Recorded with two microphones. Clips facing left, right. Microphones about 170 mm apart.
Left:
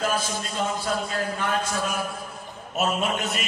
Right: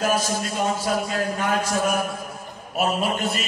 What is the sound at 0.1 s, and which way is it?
A man's voice, 40° right (ahead or behind).